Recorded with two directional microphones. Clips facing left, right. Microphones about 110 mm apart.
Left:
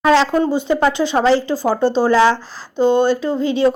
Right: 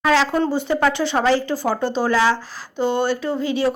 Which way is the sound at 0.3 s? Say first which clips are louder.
Left 3 dB; 15° left (ahead or behind).